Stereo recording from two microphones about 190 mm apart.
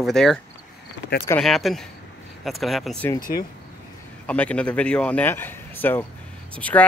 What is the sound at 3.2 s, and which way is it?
Speech, 50° left (ahead or behind).